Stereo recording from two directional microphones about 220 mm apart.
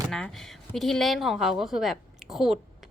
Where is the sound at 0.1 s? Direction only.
Centre (ahead or behind).